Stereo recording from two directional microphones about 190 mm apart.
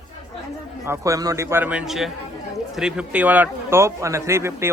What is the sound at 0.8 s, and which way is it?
A man's voice, 15° right (ahead or behind).